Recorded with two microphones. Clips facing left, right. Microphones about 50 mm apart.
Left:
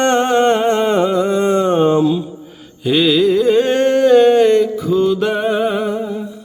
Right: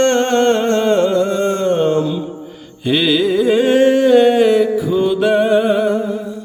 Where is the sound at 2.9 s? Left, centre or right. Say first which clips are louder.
Left 2 dB; centre.